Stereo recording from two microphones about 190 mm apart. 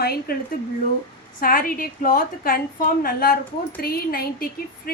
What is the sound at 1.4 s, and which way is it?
A woman's voice, 50° left (ahead or behind).